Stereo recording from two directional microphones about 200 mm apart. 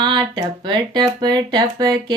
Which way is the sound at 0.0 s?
20° right (ahead or behind).